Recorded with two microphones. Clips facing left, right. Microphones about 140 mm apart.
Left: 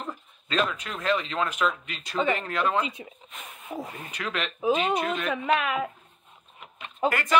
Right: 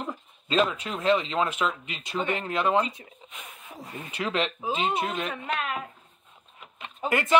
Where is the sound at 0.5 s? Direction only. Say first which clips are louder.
Right 3 dB; 25° right (ahead or behind).